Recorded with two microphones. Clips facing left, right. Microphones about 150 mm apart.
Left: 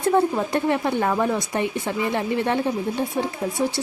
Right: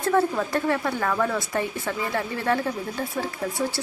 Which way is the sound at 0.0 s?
20° left (ahead or behind).